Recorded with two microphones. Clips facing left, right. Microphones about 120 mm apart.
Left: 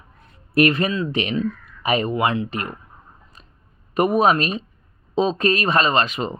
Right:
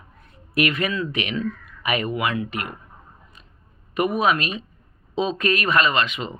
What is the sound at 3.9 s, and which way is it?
Speech, 35° left (ahead or behind).